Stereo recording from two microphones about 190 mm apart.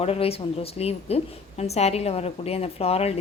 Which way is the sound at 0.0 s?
30° left (ahead or behind).